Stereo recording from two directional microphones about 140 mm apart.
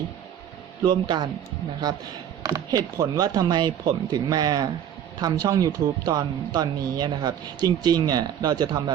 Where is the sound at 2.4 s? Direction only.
25° right (ahead or behind).